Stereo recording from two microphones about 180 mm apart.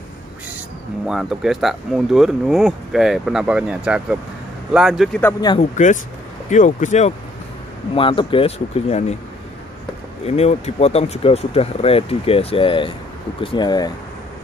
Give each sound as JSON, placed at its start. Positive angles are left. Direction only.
{"t": 1.0, "sound": "speech", "side_deg": 0}
{"t": 5.6, "sound": "speech", "side_deg": 45}
{"t": 7.9, "sound": "speech", "side_deg": 30}
{"t": 10.2, "sound": "speech", "side_deg": 35}